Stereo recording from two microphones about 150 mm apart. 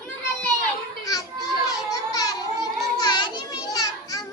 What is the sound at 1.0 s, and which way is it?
Children playing, 25° left (ahead or behind).